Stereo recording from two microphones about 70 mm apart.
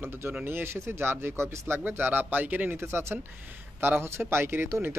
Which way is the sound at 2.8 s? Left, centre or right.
Right.